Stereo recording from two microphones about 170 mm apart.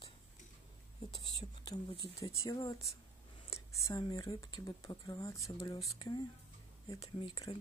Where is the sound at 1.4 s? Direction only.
25° left (ahead or behind).